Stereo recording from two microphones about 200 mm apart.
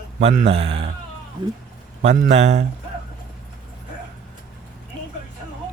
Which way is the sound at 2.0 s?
40° right (ahead or behind).